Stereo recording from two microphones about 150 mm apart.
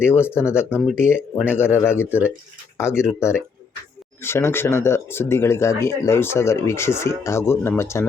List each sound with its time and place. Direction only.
0.0 s speech: 15° left (ahead or behind)
2.0 s speech: 10° right (ahead or behind)
3.2 s speech: 15° left (ahead or behind)